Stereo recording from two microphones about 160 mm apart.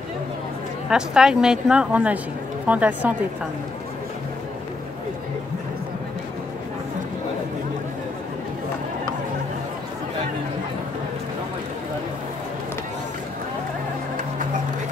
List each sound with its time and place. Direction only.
0.8 s a woman's voice: 5° right (ahead or behind)